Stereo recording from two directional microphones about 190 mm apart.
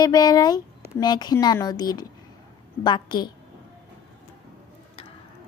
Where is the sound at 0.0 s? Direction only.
20° left (ahead or behind).